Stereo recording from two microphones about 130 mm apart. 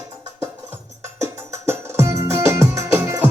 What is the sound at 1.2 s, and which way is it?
Music, 20° right (ahead or behind).